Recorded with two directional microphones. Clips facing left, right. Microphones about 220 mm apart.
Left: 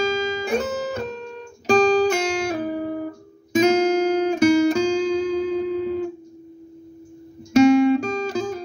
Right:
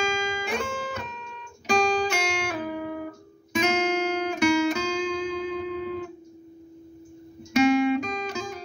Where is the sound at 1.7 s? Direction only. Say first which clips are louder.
Left 7 dB; 35° left (ahead or behind).